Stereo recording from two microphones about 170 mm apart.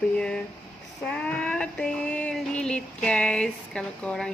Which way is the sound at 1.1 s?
5° left (ahead or behind).